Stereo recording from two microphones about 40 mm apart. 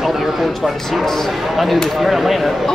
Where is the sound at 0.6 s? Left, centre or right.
Centre.